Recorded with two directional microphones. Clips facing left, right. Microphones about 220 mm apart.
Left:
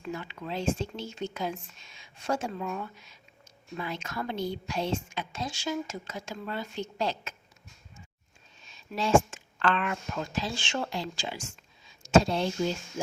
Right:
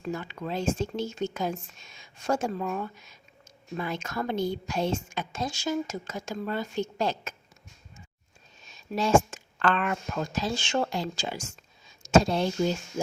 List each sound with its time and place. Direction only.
0.0 s a woman's voice: 45° right (ahead or behind)
8.6 s speech: 40° right (ahead or behind)